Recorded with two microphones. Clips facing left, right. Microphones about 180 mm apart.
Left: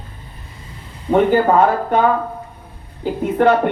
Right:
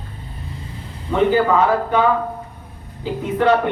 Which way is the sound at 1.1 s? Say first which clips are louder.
Left 3 dB; 50° left (ahead or behind).